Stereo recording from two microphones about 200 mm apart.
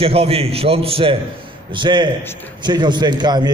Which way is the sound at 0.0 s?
30° right (ahead or behind).